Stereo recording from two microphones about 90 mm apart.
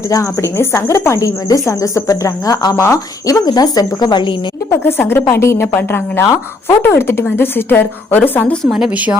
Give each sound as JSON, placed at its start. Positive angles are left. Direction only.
{"t": 0.1, "sound": "a woman's voice", "side_deg": 35}
{"t": 2.7, "sound": "a woman's voice", "side_deg": 35}
{"t": 4.7, "sound": "speech", "side_deg": 25}